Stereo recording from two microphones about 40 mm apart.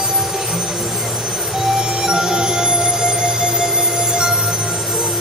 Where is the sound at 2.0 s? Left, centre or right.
Centre.